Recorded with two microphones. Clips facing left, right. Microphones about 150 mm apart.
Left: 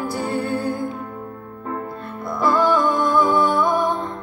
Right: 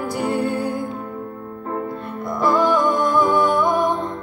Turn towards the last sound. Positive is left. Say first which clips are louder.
# right 1 dB
turn(degrees=-15)  # may be behind; listen again after turning